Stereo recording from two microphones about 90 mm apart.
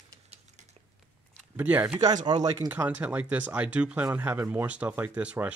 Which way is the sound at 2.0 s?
50° right (ahead or behind).